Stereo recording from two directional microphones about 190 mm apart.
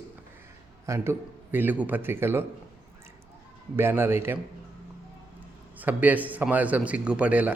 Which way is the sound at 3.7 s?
10° right (ahead or behind).